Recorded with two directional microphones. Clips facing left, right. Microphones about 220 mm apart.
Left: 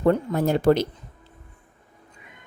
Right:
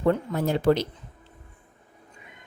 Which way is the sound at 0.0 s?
45° left (ahead or behind).